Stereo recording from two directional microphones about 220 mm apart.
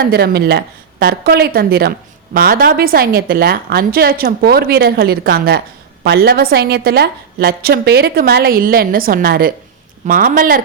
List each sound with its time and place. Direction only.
0.0 s a woman's voice: 45° right (ahead or behind)